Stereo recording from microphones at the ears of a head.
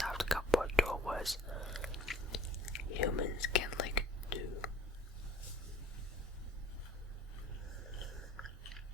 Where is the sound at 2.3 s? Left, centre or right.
Left.